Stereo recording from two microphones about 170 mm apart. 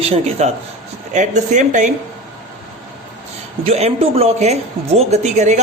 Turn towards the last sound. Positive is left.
turn(degrees=-45)  # may be behind; listen again after turning